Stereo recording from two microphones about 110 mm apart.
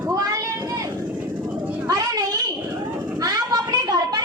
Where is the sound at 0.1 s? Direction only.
30° right (ahead or behind).